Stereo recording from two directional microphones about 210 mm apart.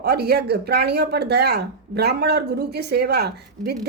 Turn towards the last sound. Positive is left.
turn(degrees=-50)  # may be behind; listen again after turning